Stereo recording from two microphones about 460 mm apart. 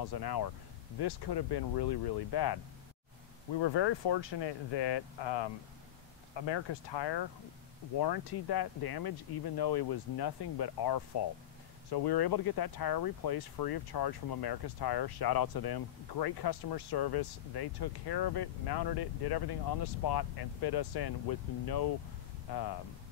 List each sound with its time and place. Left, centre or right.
0.0 s speech: left